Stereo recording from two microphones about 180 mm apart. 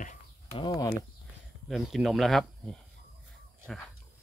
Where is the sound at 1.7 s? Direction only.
Centre (ahead or behind).